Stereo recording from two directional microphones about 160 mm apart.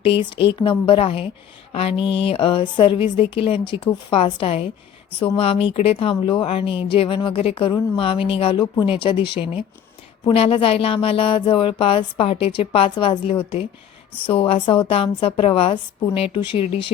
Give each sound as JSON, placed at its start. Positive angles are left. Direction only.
{"t": 0.3, "sound": "speech", "side_deg": 35}